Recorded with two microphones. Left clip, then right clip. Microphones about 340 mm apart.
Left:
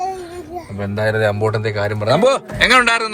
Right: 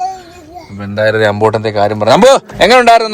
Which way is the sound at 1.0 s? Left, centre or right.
Right.